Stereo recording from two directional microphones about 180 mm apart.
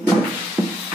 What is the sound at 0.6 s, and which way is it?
Music, 20° right (ahead or behind).